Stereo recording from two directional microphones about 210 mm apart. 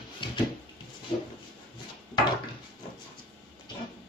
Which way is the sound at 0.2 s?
25° left (ahead or behind).